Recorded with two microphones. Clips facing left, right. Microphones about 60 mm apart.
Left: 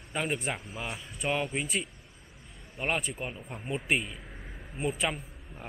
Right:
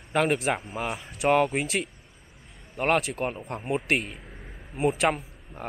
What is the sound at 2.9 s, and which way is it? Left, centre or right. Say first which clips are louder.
Speech: right 7 dB; right.